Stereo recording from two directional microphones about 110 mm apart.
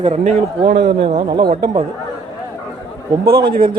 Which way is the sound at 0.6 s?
45° right (ahead or behind).